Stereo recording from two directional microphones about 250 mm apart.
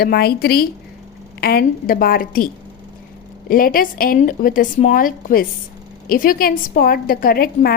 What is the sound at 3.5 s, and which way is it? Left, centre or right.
A woman's voice, left.